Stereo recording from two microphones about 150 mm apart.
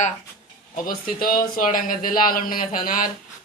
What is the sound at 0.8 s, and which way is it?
Speech, 70° left (ahead or behind).